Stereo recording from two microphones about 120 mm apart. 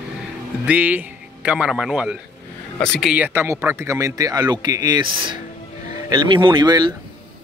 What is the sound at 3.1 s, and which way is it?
Speech, 15° right (ahead or behind).